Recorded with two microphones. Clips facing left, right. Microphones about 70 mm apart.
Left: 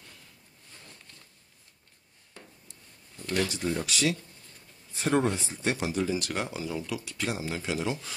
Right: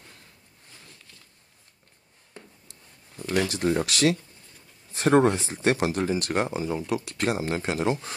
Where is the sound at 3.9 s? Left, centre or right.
Right.